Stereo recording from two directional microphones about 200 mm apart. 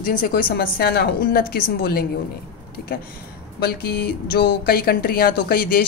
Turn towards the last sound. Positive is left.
turn(degrees=50)  # may be behind; listen again after turning